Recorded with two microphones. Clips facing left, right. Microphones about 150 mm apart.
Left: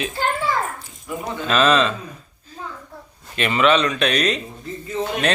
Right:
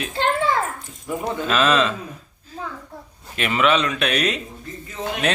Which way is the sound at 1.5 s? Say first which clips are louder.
Left 2 dB; 5° right (ahead or behind).